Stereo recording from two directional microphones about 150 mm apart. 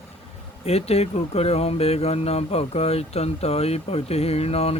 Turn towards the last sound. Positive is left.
turn(degrees=40)  # may be behind; listen again after turning